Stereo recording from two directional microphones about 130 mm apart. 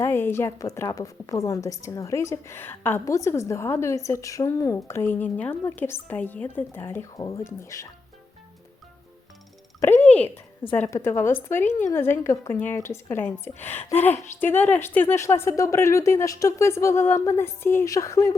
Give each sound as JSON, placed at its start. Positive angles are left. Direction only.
{"t": 0.0, "sound": "a woman's voice", "side_deg": 15}
{"t": 10.0, "sound": "a sound", "side_deg": 10}
{"t": 10.8, "sound": "a woman's voice", "side_deg": 20}